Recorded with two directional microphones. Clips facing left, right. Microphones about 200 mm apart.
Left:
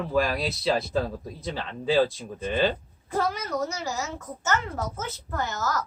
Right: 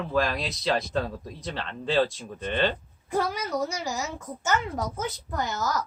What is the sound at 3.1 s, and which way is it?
A woman's voice, 10° right (ahead or behind).